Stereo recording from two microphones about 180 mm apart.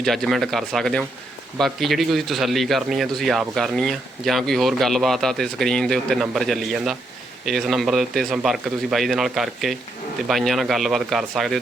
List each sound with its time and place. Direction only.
0.0 s a man's voice: centre (ahead or behind)